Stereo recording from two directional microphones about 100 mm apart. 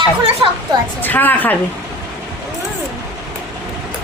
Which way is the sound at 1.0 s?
20° left (ahead or behind).